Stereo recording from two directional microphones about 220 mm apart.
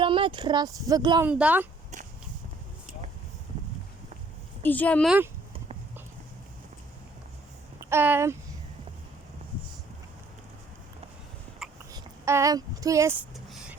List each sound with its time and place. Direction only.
0.0 s speech: 20° right (ahead or behind)
1.3 s speech: 5° right (ahead or behind)
4.6 s speech: 5° left (ahead or behind)
7.9 s speech: 10° right (ahead or behind)
11.9 s speech: 15° right (ahead or behind)
13.3 s a sound: centre (ahead or behind)